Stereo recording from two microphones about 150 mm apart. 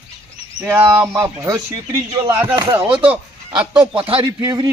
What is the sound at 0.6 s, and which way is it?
Speech, 15° right (ahead or behind).